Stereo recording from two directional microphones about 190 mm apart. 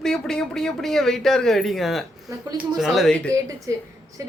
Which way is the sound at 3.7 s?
15° right (ahead or behind).